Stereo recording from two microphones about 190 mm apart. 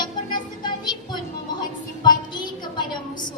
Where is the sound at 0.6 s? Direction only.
25° left (ahead or behind).